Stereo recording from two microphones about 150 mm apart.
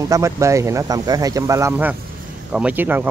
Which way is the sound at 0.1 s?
20° right (ahead or behind).